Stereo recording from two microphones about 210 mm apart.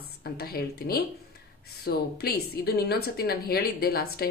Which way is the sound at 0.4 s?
45° left (ahead or behind).